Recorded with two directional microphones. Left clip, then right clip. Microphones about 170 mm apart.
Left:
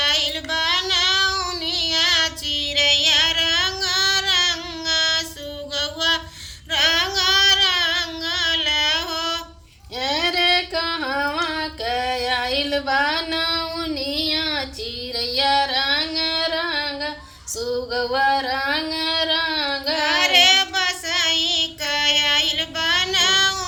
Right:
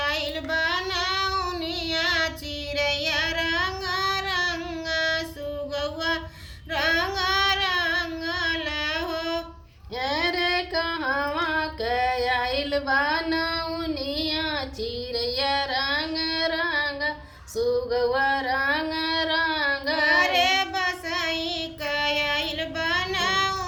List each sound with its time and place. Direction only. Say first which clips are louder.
0.0 s child singing: left 7 dB; centre (ahead or behind)
5.7 s a sound: left 7 dB; centre (ahead or behind)
6.7 s female singing: left 5 dB; centre (ahead or behind)
10.0 s female singing: left 5 dB; 25° left (ahead or behind)
14.2 s child singing: left 6 dB; 25° left (ahead or behind)
15.1 s music: left 6 dB; 25° left (ahead or behind)
17.9 s a sound: left 6 dB; 25° left (ahead or behind)
20.0 s child singing: left 5 dB; 5° left (ahead or behind)